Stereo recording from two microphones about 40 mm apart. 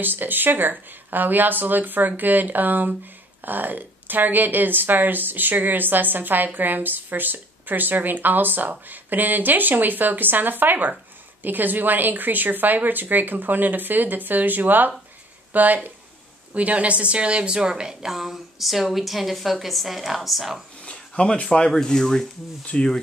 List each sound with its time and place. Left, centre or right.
0.0 s a woman's voice: right; by 20.6 s centre
20.8 s a sound: left
21.8 s speech: centre
22.7 s speech: left